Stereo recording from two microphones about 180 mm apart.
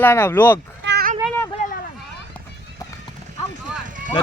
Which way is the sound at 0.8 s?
65° right (ahead or behind).